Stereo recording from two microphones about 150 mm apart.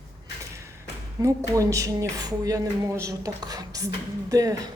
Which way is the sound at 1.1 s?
20° right (ahead or behind).